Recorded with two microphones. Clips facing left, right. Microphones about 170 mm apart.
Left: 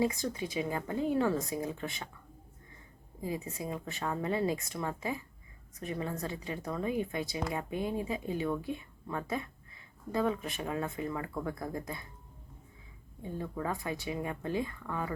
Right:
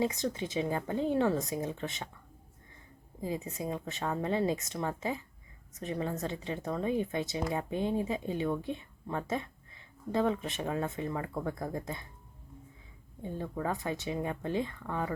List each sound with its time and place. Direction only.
0.0 s a woman's voice: 20° right (ahead or behind)
3.2 s a woman's voice: 25° right (ahead or behind)
13.2 s a woman's voice: 30° right (ahead or behind)